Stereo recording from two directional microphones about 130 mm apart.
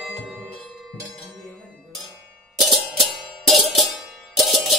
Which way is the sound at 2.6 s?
Centre (ahead or behind).